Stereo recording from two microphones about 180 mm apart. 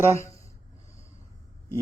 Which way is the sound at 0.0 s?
15° left (ahead or behind).